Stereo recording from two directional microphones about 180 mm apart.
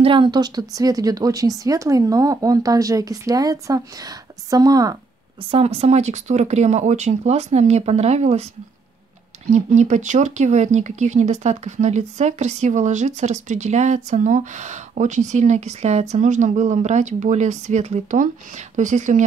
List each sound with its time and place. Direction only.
0.0 s speech: 25° right (ahead or behind)
5.5 s speech: 35° right (ahead or behind)
9.5 s speech: 40° right (ahead or behind)